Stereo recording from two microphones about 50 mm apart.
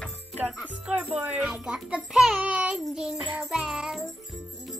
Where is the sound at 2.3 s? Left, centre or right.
Right.